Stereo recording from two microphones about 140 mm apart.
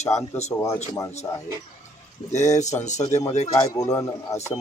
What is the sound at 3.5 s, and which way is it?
Speech, 20° left (ahead or behind).